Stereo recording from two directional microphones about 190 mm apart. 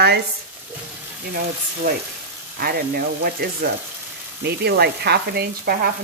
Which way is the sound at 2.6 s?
55° right (ahead or behind).